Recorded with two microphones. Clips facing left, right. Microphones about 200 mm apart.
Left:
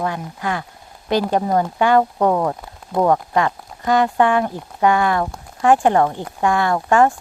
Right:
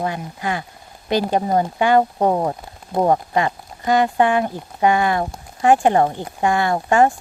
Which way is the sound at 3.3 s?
15° right (ahead or behind).